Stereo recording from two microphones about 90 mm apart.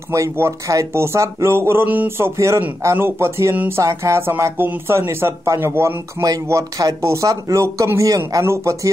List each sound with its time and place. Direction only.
0.1 s speech: 35° right (ahead or behind)
2.8 s music: 30° right (ahead or behind)
4.6 s speech: 30° right (ahead or behind)